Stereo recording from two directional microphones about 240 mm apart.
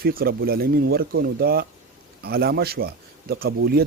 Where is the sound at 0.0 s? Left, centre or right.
Right.